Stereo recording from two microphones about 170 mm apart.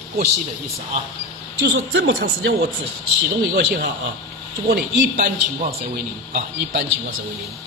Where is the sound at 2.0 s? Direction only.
80° right.